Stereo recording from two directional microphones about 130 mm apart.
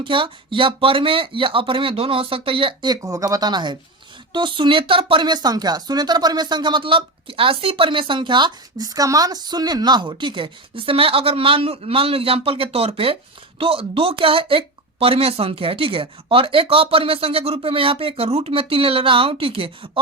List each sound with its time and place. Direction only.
0.0 s speech: 40° right (ahead or behind)